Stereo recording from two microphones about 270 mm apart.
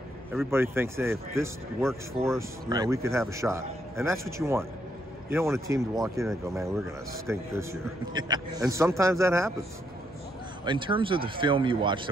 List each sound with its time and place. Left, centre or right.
0.3 s a man's voice: centre
1.8 s speech: centre
2.7 s a man's voice: centre
10.6 s speech: centre